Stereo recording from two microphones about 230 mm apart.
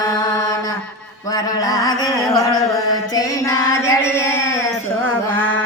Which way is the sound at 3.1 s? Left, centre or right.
Centre.